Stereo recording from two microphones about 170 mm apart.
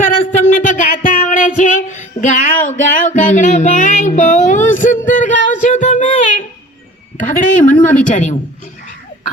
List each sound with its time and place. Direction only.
0.0 s music: 45° left (ahead or behind)
4.7 s a sound: 50° left (ahead or behind)
5.5 s music: 45° left (ahead or behind)
7.3 s speech: 50° left (ahead or behind)